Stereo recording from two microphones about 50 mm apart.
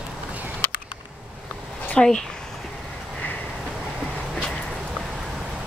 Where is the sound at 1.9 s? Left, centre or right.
Centre.